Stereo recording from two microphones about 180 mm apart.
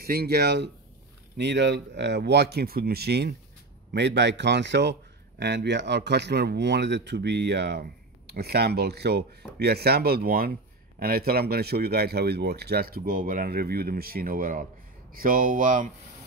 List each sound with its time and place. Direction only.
0.0 s speech: 60° right (ahead or behind)